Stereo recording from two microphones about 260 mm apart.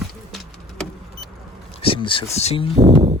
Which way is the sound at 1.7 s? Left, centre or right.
Left.